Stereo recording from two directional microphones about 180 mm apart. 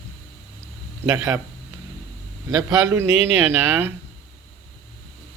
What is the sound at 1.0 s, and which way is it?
Speech, 15° right (ahead or behind).